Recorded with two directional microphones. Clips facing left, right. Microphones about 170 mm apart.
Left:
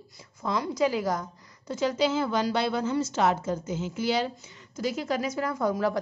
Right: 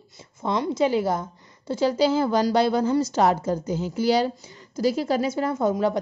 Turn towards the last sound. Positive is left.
turn(degrees=-20)  # may be behind; listen again after turning